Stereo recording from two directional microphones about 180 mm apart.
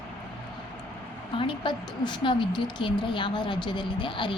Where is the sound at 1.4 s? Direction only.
25° left (ahead or behind).